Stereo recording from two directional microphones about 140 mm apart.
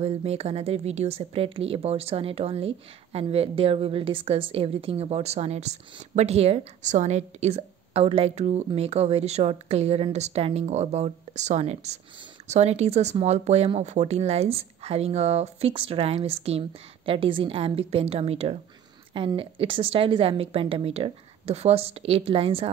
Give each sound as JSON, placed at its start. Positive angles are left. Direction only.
{"t": 0.0, "sound": "a woman's voice", "side_deg": -45}